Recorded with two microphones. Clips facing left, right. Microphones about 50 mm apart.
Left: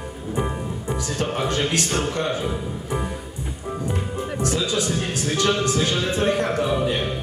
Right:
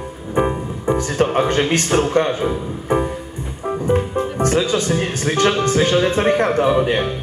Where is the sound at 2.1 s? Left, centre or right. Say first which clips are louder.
Right 7 dB; right.